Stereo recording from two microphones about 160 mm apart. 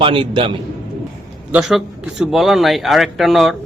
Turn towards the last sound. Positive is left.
turn(degrees=0)  # may be behind; listen again after turning